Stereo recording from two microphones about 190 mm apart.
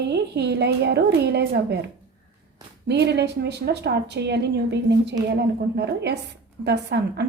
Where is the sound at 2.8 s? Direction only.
60° right (ahead or behind).